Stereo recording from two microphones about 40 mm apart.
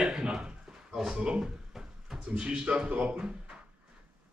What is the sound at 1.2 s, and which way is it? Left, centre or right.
A man's voice, right.